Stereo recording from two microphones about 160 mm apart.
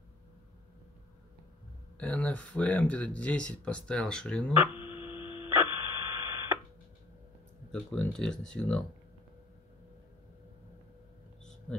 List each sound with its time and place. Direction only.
2.0 s speech: 5° left (ahead or behind)
4.7 s a sound: 30° left (ahead or behind)
6.2 s radio: 20° right (ahead or behind)
7.7 s speech: 5° left (ahead or behind)